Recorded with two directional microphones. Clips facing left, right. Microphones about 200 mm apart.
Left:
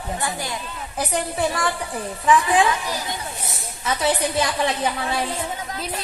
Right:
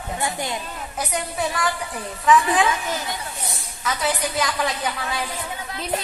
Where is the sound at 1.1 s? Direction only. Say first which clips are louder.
Left 3 dB; 30° left (ahead or behind).